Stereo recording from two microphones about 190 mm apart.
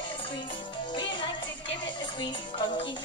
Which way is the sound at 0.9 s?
25° left (ahead or behind).